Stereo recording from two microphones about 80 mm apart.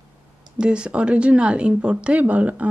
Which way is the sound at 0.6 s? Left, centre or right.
Centre.